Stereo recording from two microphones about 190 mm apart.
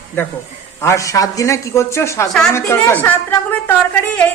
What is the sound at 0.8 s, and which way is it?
A woman's voice, 15° left (ahead or behind).